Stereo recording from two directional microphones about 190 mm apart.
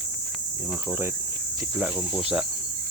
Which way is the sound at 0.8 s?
5° right (ahead or behind).